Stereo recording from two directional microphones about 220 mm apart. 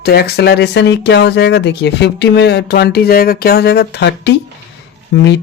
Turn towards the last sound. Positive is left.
turn(degrees=55)  # may be behind; listen again after turning